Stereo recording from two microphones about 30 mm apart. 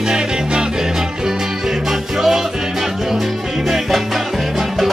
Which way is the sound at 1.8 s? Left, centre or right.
Centre.